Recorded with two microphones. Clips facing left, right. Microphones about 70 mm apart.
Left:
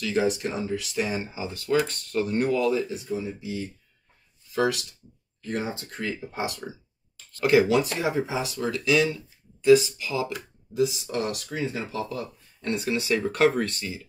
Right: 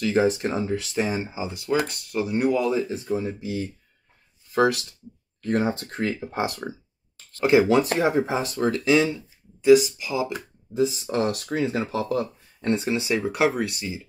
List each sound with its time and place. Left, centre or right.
0.0 s speech: right
3.0 s speech: right
4.5 s speech: right
8.8 s speech: right
10.3 s speech: right
12.6 s speech: right